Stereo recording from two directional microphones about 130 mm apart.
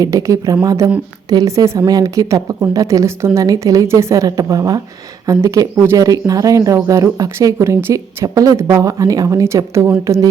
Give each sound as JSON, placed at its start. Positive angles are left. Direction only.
{"t": 0.0, "sound": "a woman's voice", "side_deg": -25}